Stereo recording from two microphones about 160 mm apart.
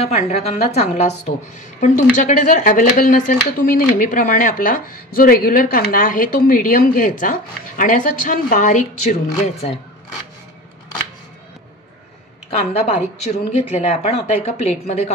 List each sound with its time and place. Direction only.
0.0 s a woman's voice: 45° left (ahead or behind)
12.4 s speech: 35° left (ahead or behind)